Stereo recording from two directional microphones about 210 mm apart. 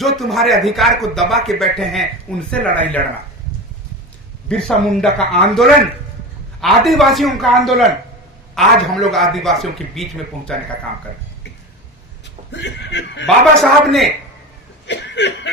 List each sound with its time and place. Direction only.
0.2 s a man's voice: centre (ahead or behind)
4.4 s a man's voice: centre (ahead or behind)
12.2 s speech: 55° left (ahead or behind)
13.2 s a man's voice: centre (ahead or behind)
14.8 s speech: 55° left (ahead or behind)